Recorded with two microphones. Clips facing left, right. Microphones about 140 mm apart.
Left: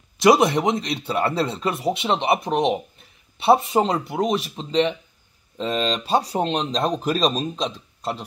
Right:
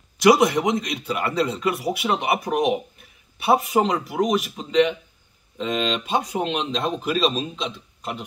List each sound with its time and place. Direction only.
0.2 s speech: 25° left (ahead or behind)